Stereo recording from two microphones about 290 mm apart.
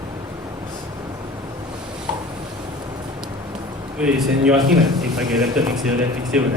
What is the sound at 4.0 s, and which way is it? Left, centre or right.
A man's voice, centre.